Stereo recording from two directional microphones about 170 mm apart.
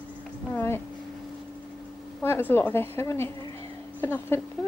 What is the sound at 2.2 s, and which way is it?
Speech, 10° left (ahead or behind).